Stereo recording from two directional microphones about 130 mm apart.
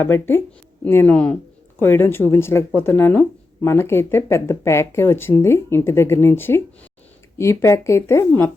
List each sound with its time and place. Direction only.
0.0 s speech: 15° left (ahead or behind)